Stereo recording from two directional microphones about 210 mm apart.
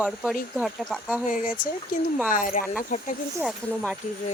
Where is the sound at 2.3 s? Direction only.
40° left (ahead or behind).